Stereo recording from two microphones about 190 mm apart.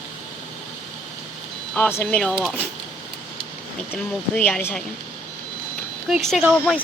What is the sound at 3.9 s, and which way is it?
Speech, 5° left (ahead or behind).